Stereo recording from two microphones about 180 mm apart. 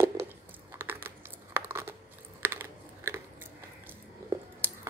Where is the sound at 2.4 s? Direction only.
15° right (ahead or behind).